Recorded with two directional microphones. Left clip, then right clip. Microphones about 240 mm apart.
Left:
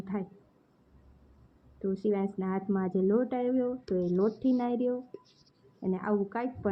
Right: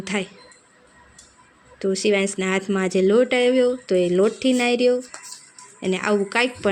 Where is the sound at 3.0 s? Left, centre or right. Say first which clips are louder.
Right 13 dB; right.